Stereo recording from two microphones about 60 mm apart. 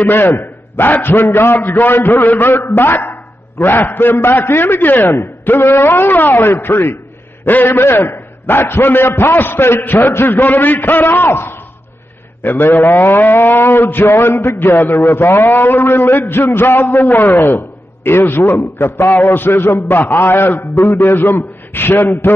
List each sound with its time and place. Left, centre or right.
0.0 s a man's voice: left
14.0 s speech: left
14.3 s a man's voice: left